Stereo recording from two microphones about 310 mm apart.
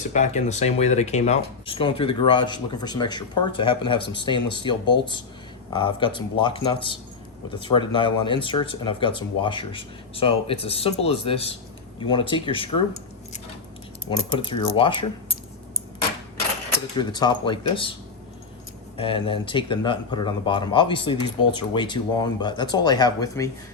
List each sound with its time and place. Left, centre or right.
0.1 s speech: left
14.1 s speech: centre
17.0 s speech: centre
18.9 s speech: centre